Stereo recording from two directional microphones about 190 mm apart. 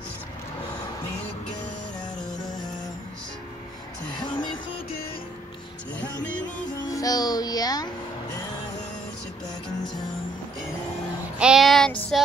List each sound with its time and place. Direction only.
4.2 s music: 25° left (ahead or behind)
6.9 s music: 20° left (ahead or behind)
11.3 s child singing: 5° right (ahead or behind)